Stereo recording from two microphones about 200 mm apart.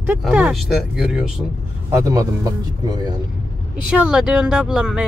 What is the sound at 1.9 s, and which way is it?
Speech, 15° right (ahead or behind).